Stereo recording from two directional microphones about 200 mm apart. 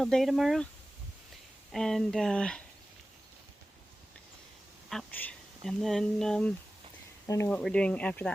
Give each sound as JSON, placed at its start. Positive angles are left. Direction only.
{"t": 0.0, "sound": "speech", "side_deg": 0}
{"t": 1.7, "sound": "speech", "side_deg": 0}
{"t": 4.9, "sound": "speech", "side_deg": 5}